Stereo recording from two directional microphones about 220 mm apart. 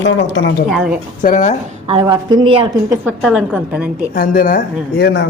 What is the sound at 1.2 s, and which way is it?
Speech, 35° left (ahead or behind).